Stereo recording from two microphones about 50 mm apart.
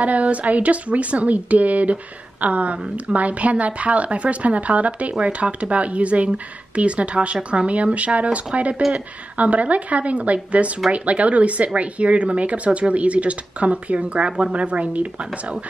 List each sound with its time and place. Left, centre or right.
0.0 s speech: right